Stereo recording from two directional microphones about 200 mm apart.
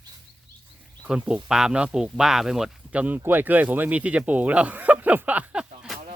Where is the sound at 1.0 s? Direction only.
5° right (ahead or behind).